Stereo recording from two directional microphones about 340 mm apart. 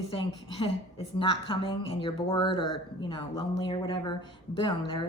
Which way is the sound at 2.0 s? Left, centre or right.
Centre.